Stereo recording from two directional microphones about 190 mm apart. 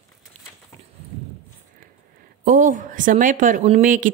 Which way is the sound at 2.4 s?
45° right (ahead or behind).